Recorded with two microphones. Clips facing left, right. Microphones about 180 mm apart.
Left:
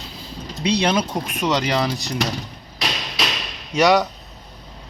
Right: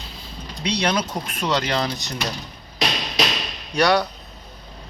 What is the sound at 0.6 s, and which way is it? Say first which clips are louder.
Speech: left 3 dB; 30° left (ahead or behind).